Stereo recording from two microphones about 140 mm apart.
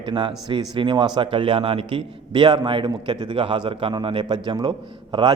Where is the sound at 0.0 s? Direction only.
35° right (ahead or behind).